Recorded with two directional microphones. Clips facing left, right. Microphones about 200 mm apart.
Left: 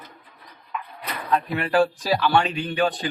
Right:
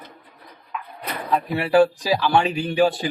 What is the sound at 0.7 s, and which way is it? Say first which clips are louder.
Bird: even; centre (ahead or behind).